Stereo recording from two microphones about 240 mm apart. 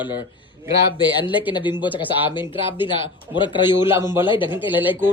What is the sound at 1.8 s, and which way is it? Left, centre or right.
Speech, centre.